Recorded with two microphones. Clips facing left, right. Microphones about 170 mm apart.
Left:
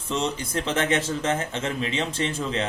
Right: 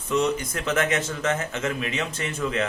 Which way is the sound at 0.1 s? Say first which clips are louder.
Right 3 dB; 30° left (ahead or behind).